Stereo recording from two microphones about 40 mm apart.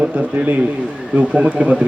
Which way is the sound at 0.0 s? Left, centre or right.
Right.